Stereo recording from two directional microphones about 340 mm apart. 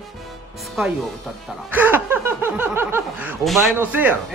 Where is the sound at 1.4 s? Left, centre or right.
Centre.